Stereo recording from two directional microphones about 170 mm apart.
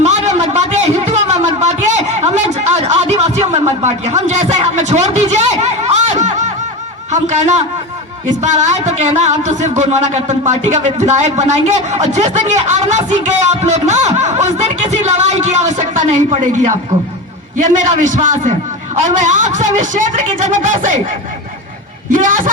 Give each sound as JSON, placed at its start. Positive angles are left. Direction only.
{"t": 0.0, "sound": "a sound", "side_deg": -40}
{"t": 7.1, "sound": "a man's voice", "side_deg": -40}
{"t": 22.1, "sound": "speech", "side_deg": -50}